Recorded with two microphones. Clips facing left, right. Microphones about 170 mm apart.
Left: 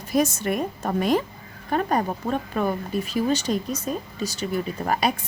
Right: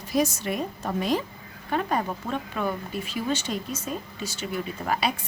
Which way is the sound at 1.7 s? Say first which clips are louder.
Left 3 dB; 40° left (ahead or behind).